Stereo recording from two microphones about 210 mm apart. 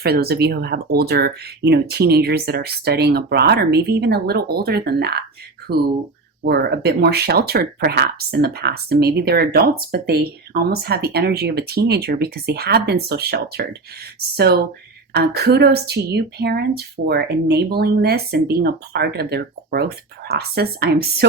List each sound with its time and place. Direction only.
0.0 s speech: 50° right (ahead or behind)
15.1 s speech: 50° right (ahead or behind)